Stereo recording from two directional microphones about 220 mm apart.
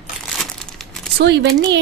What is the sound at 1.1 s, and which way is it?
Speech, 50° right (ahead or behind).